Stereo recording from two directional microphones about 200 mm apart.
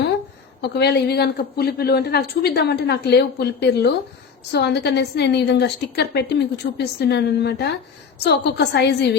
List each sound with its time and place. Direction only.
0.6 s a woman's voice: 55° left (ahead or behind)